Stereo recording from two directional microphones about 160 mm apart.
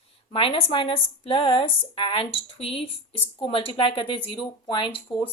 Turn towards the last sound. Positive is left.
turn(degrees=30)  # may be behind; listen again after turning